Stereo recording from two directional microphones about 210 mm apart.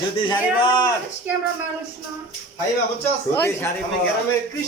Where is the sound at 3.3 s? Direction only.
10° left (ahead or behind).